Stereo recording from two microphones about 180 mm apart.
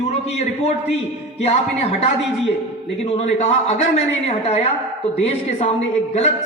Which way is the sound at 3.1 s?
35° left (ahead or behind).